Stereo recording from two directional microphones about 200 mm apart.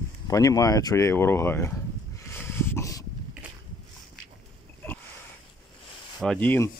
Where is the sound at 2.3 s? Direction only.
10° left (ahead or behind).